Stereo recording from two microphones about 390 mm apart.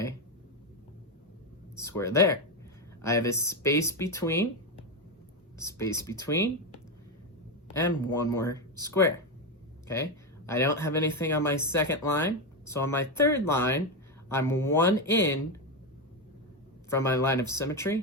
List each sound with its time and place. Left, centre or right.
1.8 s speech: centre
5.5 s speech: centre
7.7 s speech: centre
16.9 s speech: centre